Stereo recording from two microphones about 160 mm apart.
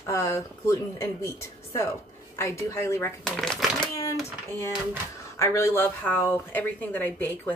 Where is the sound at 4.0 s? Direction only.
20° left (ahead or behind).